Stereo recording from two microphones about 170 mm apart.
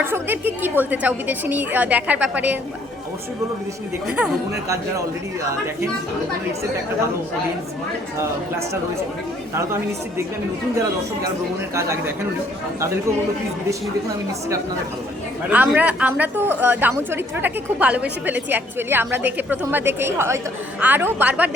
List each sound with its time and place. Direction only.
0.0 s a woman's voice: 10° right (ahead or behind)
4.0 s speech: 5° right (ahead or behind)
8.2 s a woman's voice: 15° right (ahead or behind)
11.7 s a woman's voice: 15° right (ahead or behind)
15.5 s a woman's voice: 10° right (ahead or behind)